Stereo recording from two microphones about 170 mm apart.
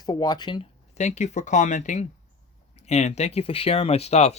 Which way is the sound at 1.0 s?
45° left (ahead or behind).